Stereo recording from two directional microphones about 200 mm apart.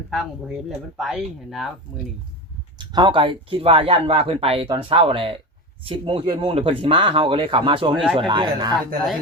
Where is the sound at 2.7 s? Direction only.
20° right (ahead or behind).